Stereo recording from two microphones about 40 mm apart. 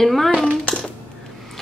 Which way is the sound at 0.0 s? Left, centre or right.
Centre.